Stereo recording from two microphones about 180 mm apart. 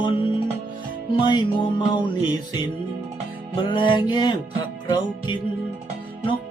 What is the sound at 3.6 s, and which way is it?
Music, 25° left (ahead or behind).